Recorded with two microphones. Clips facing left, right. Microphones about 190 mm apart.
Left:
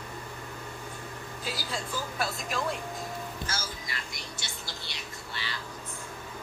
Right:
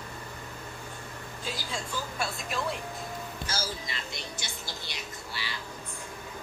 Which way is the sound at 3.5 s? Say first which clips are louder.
Right 2 dB; 25° right (ahead or behind).